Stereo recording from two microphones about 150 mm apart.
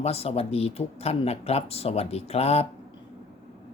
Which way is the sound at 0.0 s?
45° left (ahead or behind).